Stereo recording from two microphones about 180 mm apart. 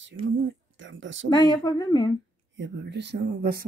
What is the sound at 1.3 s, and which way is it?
Speech, 25° left (ahead or behind).